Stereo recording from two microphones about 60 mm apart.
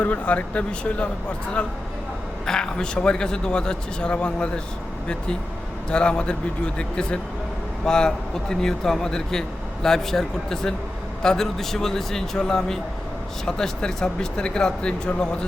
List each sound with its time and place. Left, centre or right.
0.0 s speech: left
2.5 s a man's voice: centre
5.9 s a man's voice: centre